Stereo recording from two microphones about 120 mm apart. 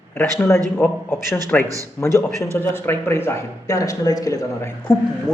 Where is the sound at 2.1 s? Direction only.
25° right (ahead or behind).